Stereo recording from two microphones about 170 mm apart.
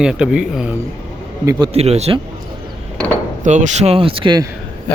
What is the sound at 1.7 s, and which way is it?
Speech, 40° right (ahead or behind).